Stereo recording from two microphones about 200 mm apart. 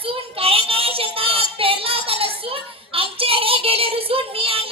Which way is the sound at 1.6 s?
25° right (ahead or behind).